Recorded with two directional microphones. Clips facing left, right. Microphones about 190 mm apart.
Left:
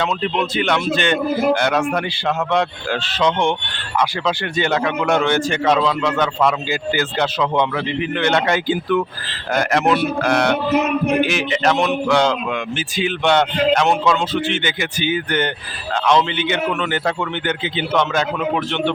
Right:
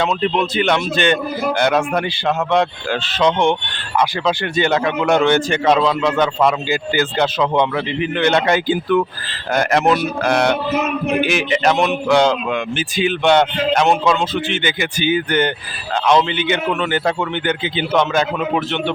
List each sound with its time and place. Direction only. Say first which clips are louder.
0.5 s speech: right 1 dB; 20° right (ahead or behind)
10.2 s speech: right 2 dB; 20° right (ahead or behind)